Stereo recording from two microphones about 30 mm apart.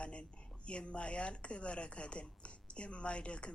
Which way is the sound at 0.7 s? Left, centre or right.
Left.